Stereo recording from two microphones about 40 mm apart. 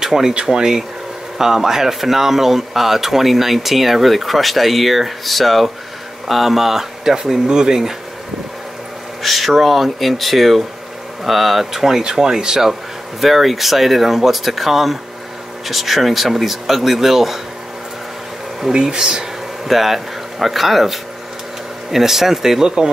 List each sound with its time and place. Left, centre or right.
0.0 s speech: centre
9.2 s speech: centre
13.2 s speech: centre
18.7 s speech: centre
19.7 s speech: centre